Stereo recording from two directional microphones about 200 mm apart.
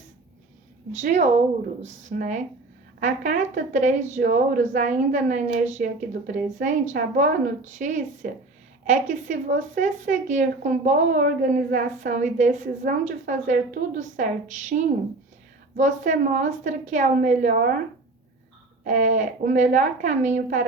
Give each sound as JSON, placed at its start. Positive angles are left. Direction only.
{"t": 1.0, "sound": "a woman's voice", "side_deg": -35}
{"t": 18.9, "sound": "a woman's voice", "side_deg": -40}